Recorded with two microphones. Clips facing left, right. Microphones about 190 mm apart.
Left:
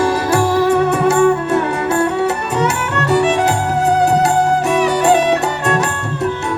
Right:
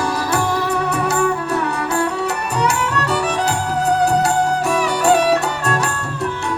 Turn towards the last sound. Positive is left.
turn(degrees=20)  # may be behind; listen again after turning